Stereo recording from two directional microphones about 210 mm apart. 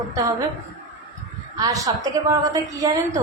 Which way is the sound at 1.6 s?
15° right (ahead or behind).